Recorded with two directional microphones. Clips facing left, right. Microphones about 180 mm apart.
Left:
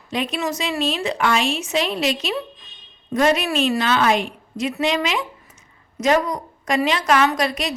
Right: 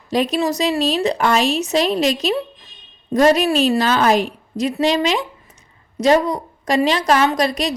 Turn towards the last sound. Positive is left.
turn(degrees=-35)  # may be behind; listen again after turning